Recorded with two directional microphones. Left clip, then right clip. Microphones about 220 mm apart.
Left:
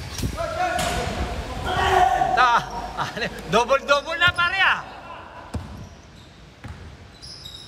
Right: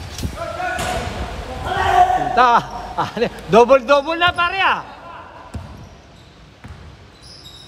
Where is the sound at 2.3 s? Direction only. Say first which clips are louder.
Right 5 dB; 25° right (ahead or behind).